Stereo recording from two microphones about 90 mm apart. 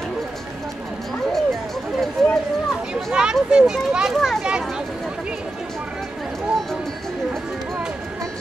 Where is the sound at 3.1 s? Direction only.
10° right (ahead or behind).